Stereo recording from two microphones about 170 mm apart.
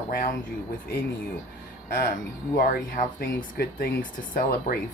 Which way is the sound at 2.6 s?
60° left (ahead or behind).